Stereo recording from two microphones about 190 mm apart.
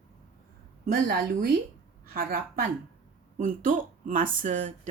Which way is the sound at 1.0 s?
50° right (ahead or behind).